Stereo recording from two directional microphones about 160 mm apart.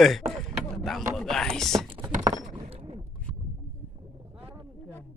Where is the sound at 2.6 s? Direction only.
35° right (ahead or behind).